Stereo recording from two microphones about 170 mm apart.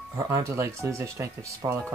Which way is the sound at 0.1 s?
15° right (ahead or behind).